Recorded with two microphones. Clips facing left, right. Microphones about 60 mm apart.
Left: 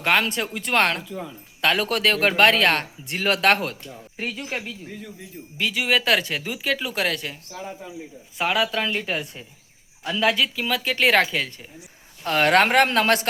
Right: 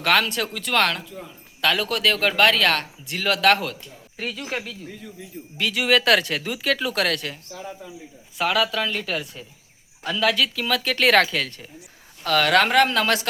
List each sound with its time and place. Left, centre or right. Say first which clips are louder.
0.0 s speech: right 1 dB; left
4.2 s speech: even; centre
5.5 s speech: right 2 dB; centre
8.4 s speech: right 1 dB; centre
12.2 s speech: even; left